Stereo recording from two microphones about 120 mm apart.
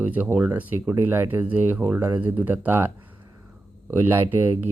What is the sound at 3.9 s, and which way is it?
Speech, 20° right (ahead or behind).